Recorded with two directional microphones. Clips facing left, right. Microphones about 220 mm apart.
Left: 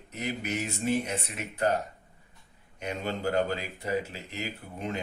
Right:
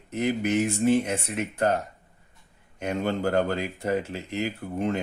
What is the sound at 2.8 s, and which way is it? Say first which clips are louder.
Speech: right 6 dB; 50° right (ahead or behind).